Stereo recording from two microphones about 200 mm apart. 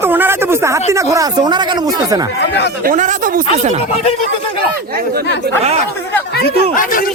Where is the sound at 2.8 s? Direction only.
40° right (ahead or behind).